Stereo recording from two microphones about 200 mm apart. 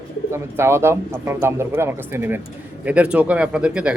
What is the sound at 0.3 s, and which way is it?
A man's voice, 10° right (ahead or behind).